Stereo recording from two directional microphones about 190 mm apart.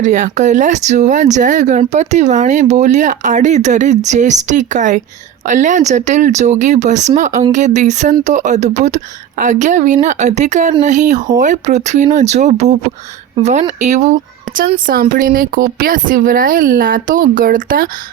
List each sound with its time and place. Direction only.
0.0 s speech: 40° right (ahead or behind)
15.1 s speech: 50° right (ahead or behind)